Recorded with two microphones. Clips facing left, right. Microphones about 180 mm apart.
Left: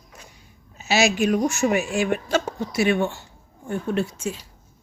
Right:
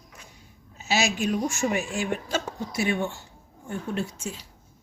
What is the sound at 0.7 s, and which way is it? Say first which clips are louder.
Speech: left 5 dB; 75° left (ahead or behind).